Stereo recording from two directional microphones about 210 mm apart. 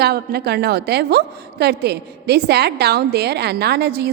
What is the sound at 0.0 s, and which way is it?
A woman's voice, 50° right (ahead or behind).